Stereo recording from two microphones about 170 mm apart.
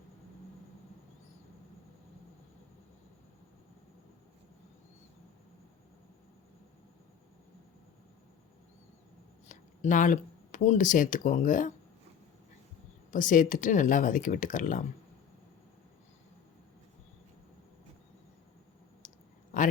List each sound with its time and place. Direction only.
9.5 s speech: 50° left (ahead or behind)
13.1 s speech: 50° left (ahead or behind)
19.0 s clicking: 50° left (ahead or behind)